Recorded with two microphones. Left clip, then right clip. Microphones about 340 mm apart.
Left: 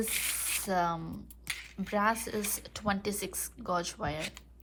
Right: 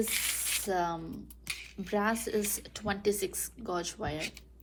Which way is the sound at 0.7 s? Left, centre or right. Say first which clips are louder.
Left 3 dB; centre.